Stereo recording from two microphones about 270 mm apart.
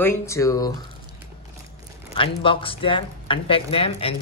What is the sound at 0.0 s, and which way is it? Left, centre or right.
Speech, centre.